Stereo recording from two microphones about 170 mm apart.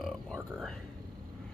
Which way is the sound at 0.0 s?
Centre (ahead or behind).